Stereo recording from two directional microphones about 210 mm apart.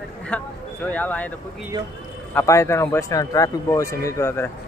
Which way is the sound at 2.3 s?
15° left (ahead or behind).